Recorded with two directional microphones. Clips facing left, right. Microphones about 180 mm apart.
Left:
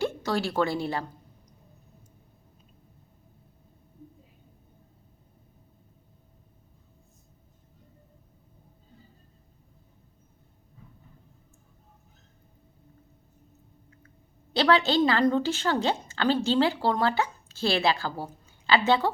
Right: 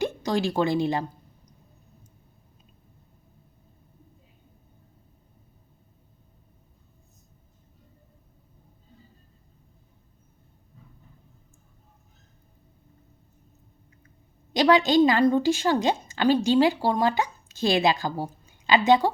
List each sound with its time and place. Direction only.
0.0 s a woman's voice: 15° right (ahead or behind)
14.5 s a woman's voice: 15° right (ahead or behind)